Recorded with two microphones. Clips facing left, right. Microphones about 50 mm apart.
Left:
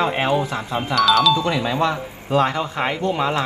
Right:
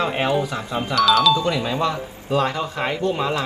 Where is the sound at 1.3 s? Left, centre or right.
Left.